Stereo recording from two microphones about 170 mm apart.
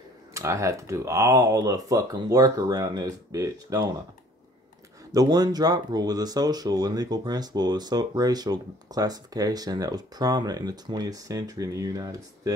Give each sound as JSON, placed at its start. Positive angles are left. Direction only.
{"t": 0.3, "sound": "speech", "side_deg": -15}
{"t": 5.1, "sound": "speech", "side_deg": -25}